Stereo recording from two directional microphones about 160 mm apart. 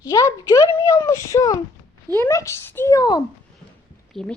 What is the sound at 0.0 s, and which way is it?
A child's voice, 20° left (ahead or behind).